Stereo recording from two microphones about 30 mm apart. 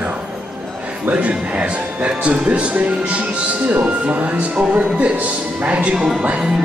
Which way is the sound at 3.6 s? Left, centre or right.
Right.